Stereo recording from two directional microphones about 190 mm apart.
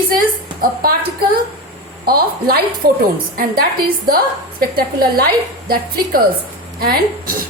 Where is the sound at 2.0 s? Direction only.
50° right (ahead or behind).